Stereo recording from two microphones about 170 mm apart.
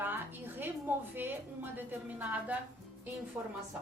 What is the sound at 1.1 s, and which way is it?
A woman's voice, 10° right (ahead or behind).